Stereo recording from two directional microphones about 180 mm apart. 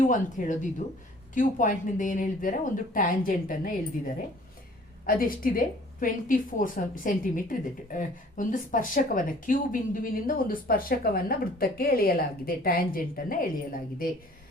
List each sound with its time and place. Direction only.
0.0 s speech: 45° left (ahead or behind)
5.0 s speech: 50° left (ahead or behind)